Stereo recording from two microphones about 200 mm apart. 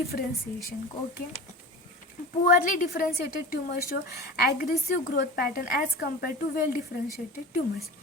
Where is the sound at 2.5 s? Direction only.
40° left (ahead or behind).